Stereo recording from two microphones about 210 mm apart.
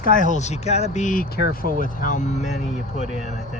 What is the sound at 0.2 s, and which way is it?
Speech, 35° left (ahead or behind).